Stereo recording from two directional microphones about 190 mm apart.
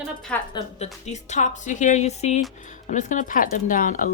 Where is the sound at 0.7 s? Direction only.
35° left (ahead or behind).